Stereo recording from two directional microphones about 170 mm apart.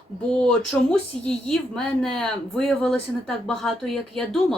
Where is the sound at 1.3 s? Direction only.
5° left (ahead or behind).